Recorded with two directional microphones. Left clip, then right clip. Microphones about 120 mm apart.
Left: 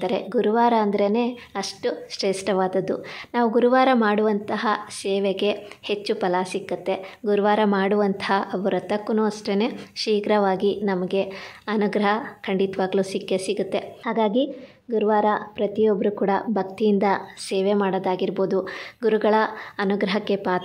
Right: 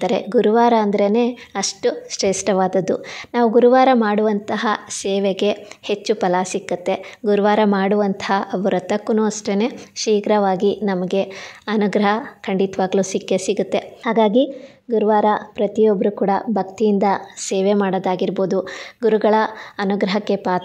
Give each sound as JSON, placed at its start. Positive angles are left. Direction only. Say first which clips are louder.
{"t": 0.0, "sound": "a woman's voice", "louder": "right 6 dB", "side_deg": -50}
{"t": 17.6, "sound": "a woman's voice", "louder": "right 4 dB", "side_deg": -45}